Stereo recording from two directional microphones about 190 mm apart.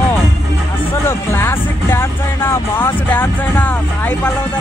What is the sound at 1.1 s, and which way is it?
Speech, 15° left (ahead or behind).